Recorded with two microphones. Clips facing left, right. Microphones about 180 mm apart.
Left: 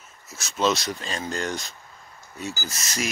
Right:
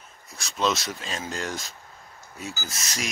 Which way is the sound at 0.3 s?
Centre (ahead or behind).